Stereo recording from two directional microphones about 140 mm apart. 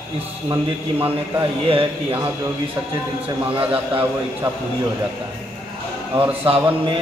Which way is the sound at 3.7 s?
15° right (ahead or behind).